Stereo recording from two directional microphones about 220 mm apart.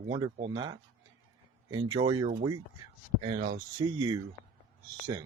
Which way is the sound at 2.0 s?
20° right (ahead or behind).